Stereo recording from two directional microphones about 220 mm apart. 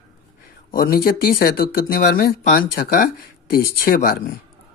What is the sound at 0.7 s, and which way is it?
Speech, 45° left (ahead or behind).